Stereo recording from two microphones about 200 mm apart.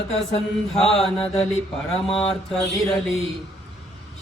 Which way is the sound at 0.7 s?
Centre (ahead or behind).